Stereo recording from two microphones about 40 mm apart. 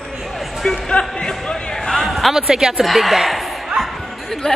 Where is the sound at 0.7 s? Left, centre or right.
Left.